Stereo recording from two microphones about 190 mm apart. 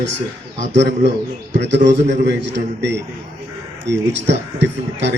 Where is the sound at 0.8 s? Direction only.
65° right (ahead or behind).